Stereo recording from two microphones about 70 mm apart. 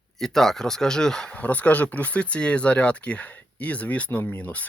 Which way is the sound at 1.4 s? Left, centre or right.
Left.